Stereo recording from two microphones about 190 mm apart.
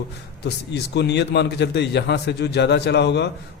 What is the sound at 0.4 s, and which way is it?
A man's voice, 60° left (ahead or behind).